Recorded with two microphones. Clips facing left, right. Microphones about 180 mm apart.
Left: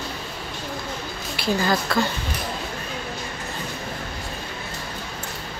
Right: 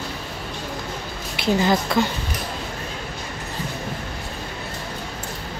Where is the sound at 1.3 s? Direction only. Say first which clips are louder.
Right 3 dB; 20° right (ahead or behind).